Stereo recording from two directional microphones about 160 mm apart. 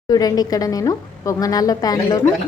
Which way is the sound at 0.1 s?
25° left (ahead or behind).